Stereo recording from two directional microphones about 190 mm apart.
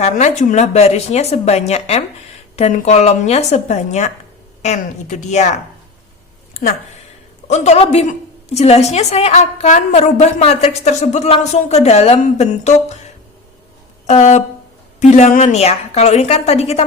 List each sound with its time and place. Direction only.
0.0 s a woman's voice: 35° left (ahead or behind)
7.4 s a woman's voice: 35° left (ahead or behind)
14.1 s a woman's voice: 40° left (ahead or behind)